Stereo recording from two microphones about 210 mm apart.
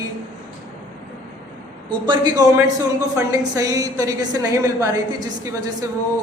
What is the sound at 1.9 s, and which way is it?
A man's voice, 20° right (ahead or behind).